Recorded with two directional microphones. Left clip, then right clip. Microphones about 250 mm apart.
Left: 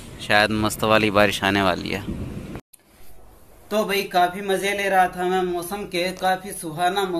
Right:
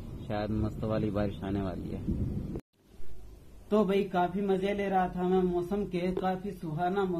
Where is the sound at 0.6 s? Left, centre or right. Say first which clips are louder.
Left 15 dB; left.